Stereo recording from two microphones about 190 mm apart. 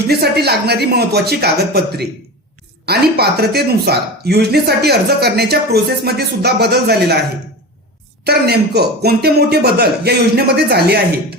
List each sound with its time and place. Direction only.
0.1 s speech: 55° right (ahead or behind)